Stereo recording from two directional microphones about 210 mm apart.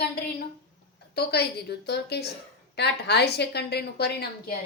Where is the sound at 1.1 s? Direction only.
50° left (ahead or behind).